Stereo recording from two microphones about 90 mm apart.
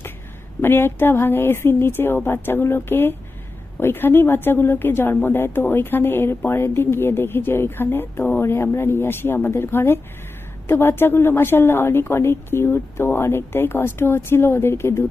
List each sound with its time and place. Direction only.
0.6 s speech: 25° left (ahead or behind)